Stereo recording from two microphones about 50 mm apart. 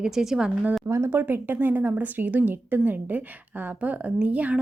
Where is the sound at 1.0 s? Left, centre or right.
Right.